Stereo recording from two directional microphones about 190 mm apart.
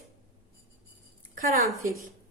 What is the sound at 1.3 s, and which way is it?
Speech, 50° right (ahead or behind).